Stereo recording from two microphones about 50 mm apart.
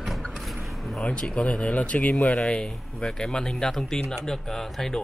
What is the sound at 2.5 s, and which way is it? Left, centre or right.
Speech, centre.